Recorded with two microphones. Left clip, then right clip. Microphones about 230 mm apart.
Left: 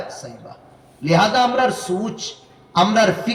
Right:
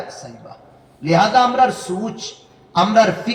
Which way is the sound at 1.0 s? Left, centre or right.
Left.